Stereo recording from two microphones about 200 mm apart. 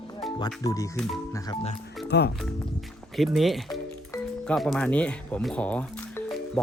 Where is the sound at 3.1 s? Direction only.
Centre (ahead or behind).